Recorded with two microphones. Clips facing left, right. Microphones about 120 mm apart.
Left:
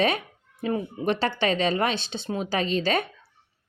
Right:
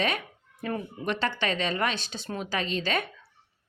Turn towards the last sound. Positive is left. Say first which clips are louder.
# left 5 dB
turn(degrees=35)  # may be behind; listen again after turning